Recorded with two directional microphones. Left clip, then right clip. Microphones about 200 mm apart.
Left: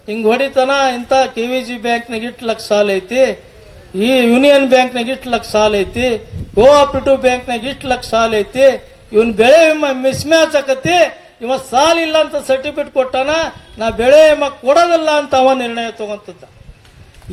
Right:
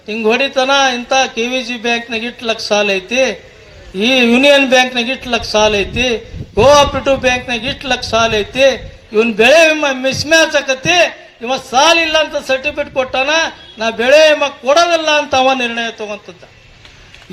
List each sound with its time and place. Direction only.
0.1 s a man's voice: 60° left (ahead or behind)